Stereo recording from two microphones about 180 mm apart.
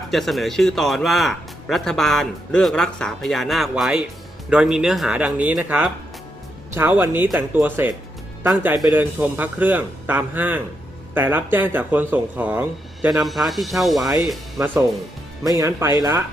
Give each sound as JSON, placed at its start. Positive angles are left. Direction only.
{"t": 0.1, "sound": "a man's voice", "side_deg": 0}
{"t": 15.4, "sound": "a man's voice", "side_deg": -15}